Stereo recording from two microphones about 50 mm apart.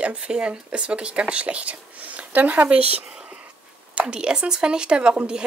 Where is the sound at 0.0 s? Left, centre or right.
Right.